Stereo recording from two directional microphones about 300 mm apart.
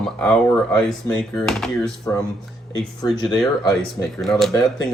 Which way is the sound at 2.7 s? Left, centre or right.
Centre.